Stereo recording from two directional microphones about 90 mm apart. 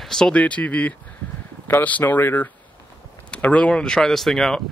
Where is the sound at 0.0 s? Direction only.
5° left (ahead or behind).